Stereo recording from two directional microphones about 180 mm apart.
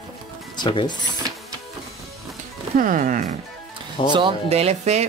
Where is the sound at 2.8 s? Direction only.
45° right (ahead or behind).